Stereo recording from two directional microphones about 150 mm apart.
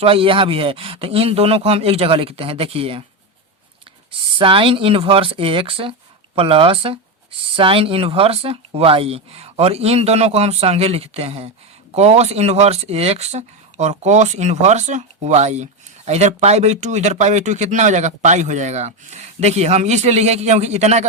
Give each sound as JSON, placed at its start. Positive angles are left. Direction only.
{"t": 0.0, "sound": "speech", "side_deg": -40}
{"t": 4.4, "sound": "speech", "side_deg": -35}